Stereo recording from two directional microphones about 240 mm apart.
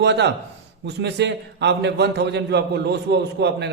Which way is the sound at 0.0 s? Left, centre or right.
Right.